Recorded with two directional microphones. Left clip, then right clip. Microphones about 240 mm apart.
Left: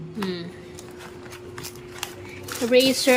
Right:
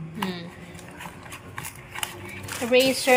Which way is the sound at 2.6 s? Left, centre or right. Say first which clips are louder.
Left 1 dB; centre.